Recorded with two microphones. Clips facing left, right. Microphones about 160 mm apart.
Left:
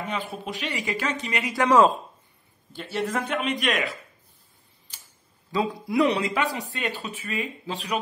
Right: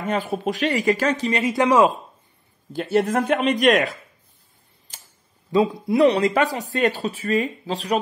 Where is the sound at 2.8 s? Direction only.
45° right (ahead or behind).